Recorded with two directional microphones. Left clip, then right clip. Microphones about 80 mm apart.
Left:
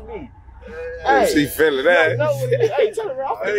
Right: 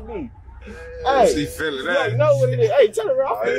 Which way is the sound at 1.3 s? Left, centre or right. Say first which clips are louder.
Left 5 dB; left.